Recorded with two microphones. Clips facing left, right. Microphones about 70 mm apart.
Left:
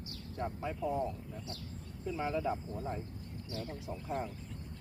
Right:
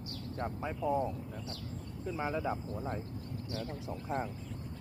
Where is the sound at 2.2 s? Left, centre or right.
Right.